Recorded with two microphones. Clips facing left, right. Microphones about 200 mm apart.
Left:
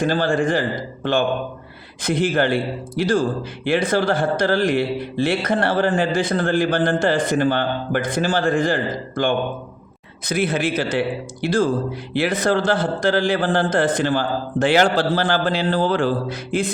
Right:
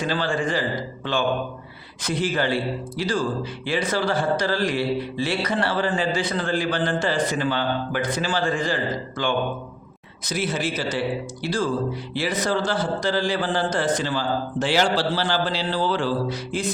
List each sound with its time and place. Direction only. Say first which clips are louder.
0.0 s speech: left 5 dB; 50° left (ahead or behind)
2.0 s a man's voice: left 5 dB; 55° left (ahead or behind)